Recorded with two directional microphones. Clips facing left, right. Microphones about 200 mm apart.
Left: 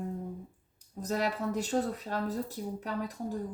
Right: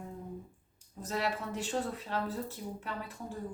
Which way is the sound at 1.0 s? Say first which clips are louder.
Left 4 dB; 45° left (ahead or behind).